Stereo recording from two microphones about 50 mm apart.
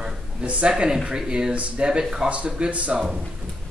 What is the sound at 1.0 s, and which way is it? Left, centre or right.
Speech, centre.